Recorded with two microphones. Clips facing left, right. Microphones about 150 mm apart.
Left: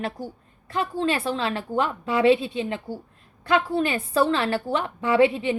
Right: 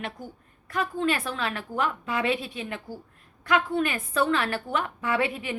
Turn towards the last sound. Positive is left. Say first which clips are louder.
# left 8 dB
turn(degrees=30)  # may be behind; listen again after turning